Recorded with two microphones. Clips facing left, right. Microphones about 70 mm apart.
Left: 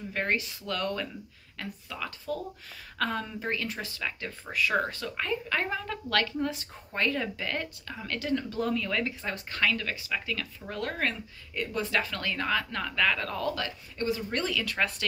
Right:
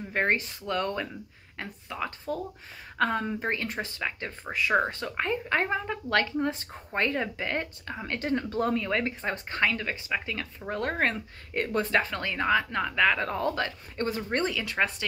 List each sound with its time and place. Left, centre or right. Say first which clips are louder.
0.1 s speech: right 4 dB; right
11.9 s speech: right 3 dB; right
14.4 s speech: right 3 dB; right